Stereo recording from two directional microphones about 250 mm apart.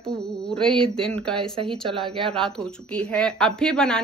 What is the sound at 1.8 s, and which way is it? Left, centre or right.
Speech, centre.